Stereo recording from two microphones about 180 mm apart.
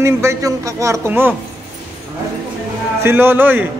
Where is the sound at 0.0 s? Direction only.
15° right (ahead or behind).